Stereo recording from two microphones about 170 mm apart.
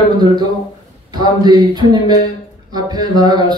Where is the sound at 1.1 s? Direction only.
25° right (ahead or behind).